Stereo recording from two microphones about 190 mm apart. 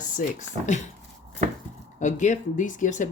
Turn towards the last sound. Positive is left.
turn(degrees=40)  # may be behind; listen again after turning